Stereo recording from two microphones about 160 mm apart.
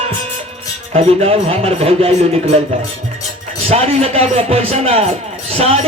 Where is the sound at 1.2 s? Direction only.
40° right (ahead or behind).